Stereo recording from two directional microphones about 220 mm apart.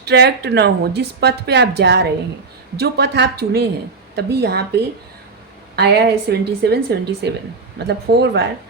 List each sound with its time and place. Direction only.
0.0 s a woman's voice: 50° right (ahead or behind)
5.7 s a woman's voice: 50° right (ahead or behind)